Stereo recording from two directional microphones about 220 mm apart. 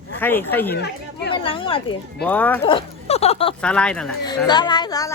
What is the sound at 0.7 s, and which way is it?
Speech, 50° left (ahead or behind).